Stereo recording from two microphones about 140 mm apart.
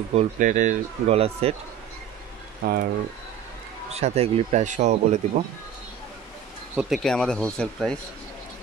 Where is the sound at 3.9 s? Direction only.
50° right (ahead or behind).